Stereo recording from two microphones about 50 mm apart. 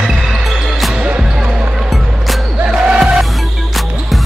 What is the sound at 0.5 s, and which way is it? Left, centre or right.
Basketball bounce, centre.